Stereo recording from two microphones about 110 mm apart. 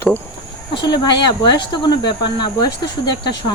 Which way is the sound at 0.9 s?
45° left (ahead or behind).